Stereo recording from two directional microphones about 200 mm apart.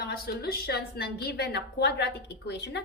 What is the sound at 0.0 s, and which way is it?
A woman's voice, 50° left (ahead or behind).